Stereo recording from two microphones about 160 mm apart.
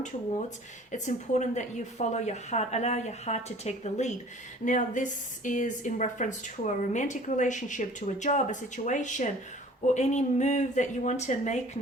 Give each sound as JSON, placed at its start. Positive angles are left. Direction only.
{"t": 0.9, "sound": "a woman's voice", "side_deg": 50}